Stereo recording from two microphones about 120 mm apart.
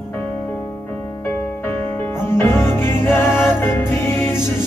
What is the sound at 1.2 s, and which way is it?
Music, 20° left (ahead or behind).